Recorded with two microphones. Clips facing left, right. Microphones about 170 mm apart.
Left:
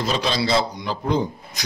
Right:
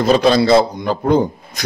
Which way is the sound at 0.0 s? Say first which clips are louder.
Right 10 dB; 55° right (ahead or behind).